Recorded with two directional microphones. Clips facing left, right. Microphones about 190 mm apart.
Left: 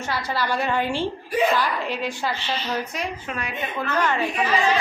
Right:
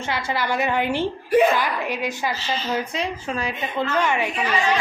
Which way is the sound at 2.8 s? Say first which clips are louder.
Right 3 dB; 30° right (ahead or behind).